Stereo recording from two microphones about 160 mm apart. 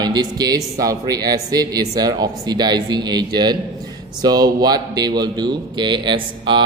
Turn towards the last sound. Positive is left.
turn(degrees=-30)  # may be behind; listen again after turning